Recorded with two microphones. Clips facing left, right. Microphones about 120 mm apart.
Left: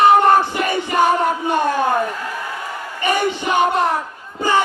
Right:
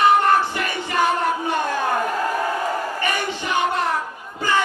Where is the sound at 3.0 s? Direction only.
20° left (ahead or behind).